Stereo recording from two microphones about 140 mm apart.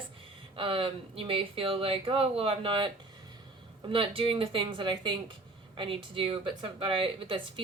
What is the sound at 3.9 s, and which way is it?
A woman's voice, 40° right (ahead or behind).